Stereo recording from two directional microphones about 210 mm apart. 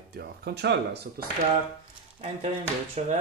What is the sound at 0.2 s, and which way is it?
Speech, 55° right (ahead or behind).